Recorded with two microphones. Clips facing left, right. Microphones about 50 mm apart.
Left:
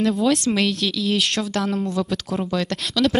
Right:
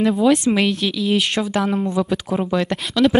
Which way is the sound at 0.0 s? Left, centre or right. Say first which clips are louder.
Right 4 dB; centre.